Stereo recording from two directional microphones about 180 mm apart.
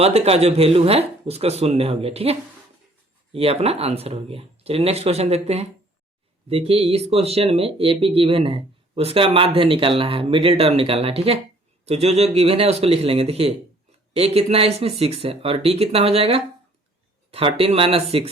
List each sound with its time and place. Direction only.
0.0 s speech: 35° right (ahead or behind)